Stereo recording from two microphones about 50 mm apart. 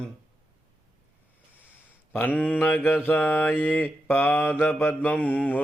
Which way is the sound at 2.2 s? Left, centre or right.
Left.